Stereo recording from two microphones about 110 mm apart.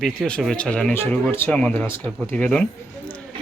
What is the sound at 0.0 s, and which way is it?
Speech, 5° left (ahead or behind).